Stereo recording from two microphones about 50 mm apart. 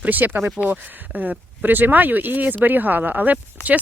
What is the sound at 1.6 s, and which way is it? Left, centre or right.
Speech, right.